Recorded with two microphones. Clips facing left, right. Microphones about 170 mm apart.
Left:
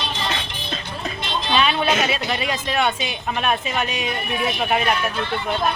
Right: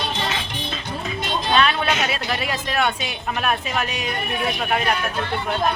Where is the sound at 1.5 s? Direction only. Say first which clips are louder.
Left 1 dB; centre (ahead or behind).